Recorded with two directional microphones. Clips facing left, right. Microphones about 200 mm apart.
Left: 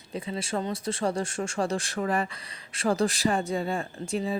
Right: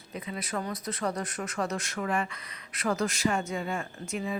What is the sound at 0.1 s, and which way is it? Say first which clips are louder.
Speech: left 4 dB; 30° left (ahead or behind).